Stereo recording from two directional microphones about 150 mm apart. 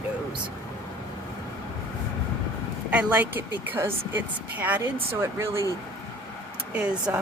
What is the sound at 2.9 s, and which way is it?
Speech, 10° right (ahead or behind).